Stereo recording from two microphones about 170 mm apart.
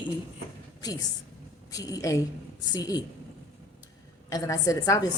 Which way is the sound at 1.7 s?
20° left (ahead or behind).